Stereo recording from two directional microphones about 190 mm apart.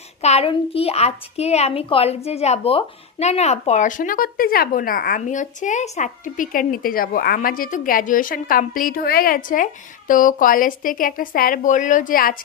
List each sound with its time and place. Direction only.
0.2 s a child's voice: 35° left (ahead or behind)